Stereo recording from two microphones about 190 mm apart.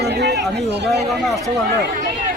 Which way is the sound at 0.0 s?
60° right (ahead or behind).